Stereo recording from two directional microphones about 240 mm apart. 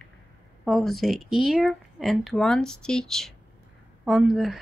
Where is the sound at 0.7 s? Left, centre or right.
Centre.